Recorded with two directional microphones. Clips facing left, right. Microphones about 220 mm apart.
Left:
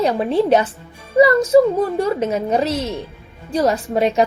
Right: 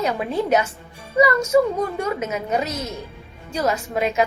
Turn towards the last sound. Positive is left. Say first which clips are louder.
# left 5 dB
turn(degrees=35)  # may be behind; listen again after turning